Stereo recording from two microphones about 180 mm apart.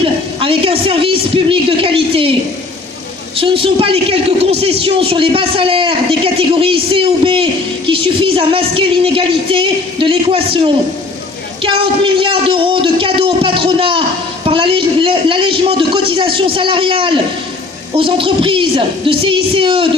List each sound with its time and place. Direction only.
0.0 s a woman's voice: 30° right (ahead or behind)
3.3 s a man's voice: 30° right (ahead or behind)